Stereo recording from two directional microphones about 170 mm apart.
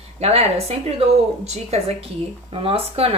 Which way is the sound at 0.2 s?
40° right (ahead or behind).